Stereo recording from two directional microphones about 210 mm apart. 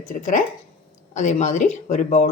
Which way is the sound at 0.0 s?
35° left (ahead or behind).